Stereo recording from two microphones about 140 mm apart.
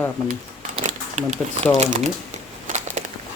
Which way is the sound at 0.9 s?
55° right (ahead or behind).